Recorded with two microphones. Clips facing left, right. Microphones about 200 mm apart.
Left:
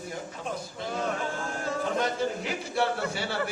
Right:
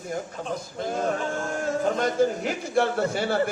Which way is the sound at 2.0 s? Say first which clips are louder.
Right 6 dB; 50° right (ahead or behind).